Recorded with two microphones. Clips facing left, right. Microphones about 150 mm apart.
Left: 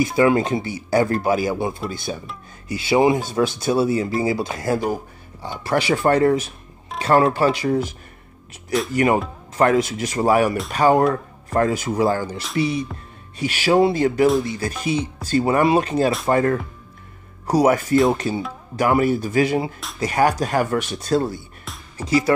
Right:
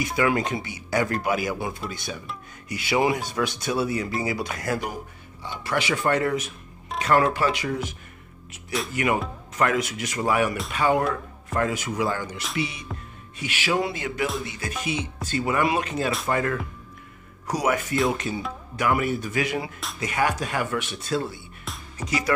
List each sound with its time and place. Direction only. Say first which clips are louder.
0.0 s speech: left 6 dB; 30° left (ahead or behind)
7.0 s music: left 4 dB; 30° left (ahead or behind)
7.3 s speech: left 6 dB; 35° left (ahead or behind)
8.9 s speech: left 6 dB; 35° left (ahead or behind)
21.7 s music: even; centre (ahead or behind)